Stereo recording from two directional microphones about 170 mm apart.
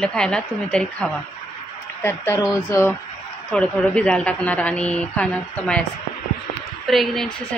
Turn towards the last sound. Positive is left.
turn(degrees=0)  # may be behind; listen again after turning